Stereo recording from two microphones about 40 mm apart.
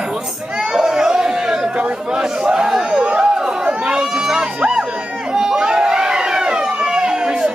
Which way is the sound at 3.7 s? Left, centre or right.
Right.